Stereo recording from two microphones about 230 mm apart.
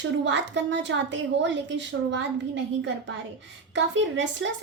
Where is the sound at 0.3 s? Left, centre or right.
Right.